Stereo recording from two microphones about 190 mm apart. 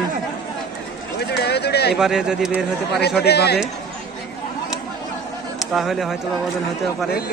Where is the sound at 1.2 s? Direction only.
60° left (ahead or behind).